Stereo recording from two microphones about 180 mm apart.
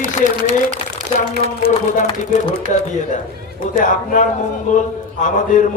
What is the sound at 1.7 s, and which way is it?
Speech, 40° left (ahead or behind).